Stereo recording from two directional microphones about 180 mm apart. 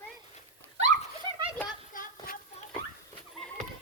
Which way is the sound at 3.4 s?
5° left (ahead or behind).